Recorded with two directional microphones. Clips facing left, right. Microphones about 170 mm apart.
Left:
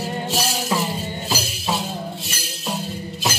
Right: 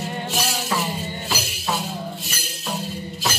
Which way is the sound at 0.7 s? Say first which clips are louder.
Left 3 dB; 20° left (ahead or behind).